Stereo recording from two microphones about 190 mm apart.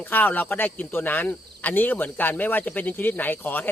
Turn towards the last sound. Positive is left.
turn(degrees=10)  # may be behind; listen again after turning